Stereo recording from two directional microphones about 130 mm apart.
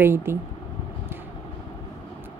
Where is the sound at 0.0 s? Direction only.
20° right (ahead or behind).